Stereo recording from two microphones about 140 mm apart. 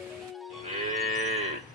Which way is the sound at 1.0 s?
55° right (ahead or behind).